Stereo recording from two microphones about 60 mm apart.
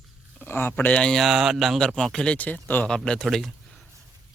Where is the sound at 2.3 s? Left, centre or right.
Left.